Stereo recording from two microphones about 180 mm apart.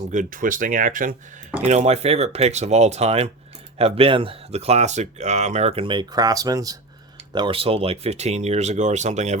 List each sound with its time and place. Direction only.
0.1 s speech: 45° right (ahead or behind)
1.6 s speech: 40° right (ahead or behind)